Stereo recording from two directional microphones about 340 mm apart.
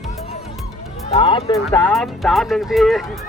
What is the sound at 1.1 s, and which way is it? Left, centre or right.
Speech, centre.